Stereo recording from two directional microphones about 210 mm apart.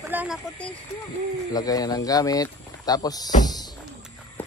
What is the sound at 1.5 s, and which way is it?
Speech, 20° left (ahead or behind).